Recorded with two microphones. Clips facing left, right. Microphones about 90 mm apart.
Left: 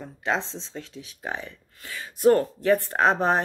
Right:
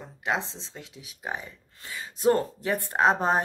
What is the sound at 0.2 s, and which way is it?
Speech, 15° right (ahead or behind).